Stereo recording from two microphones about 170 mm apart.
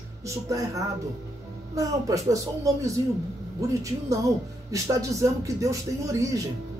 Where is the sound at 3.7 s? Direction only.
20° right (ahead or behind).